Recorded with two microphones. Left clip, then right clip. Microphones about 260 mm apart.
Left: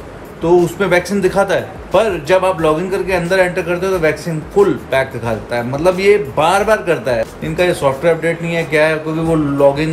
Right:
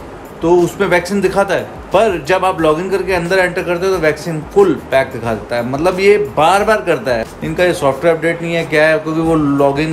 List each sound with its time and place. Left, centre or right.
0.4 s speech: centre